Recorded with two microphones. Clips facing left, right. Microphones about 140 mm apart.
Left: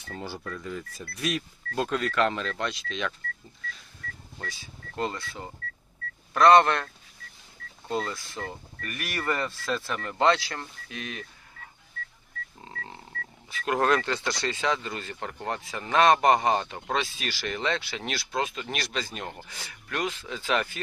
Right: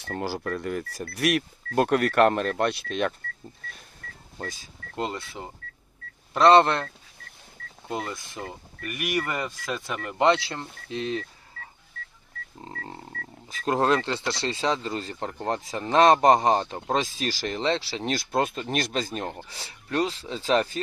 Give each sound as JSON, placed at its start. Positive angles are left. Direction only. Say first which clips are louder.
{"t": 0.0, "sound": "speech", "louder": "right 7 dB", "side_deg": -70}
{"t": 4.4, "sound": "speech", "louder": "right 5 dB", "side_deg": -40}
{"t": 4.9, "sound": "speech", "louder": "right 1 dB", "side_deg": -20}
{"t": 7.9, "sound": "speech", "louder": "left 1 dB", "side_deg": -15}
{"t": 12.6, "sound": "speech", "louder": "right 6 dB", "side_deg": -35}
{"t": 18.2, "sound": "speech", "louder": "right 3 dB", "side_deg": -50}
{"t": 19.5, "sound": "speech", "louder": "right 4 dB", "side_deg": -30}